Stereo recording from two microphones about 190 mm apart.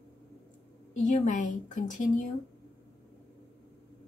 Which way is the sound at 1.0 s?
40° left (ahead or behind).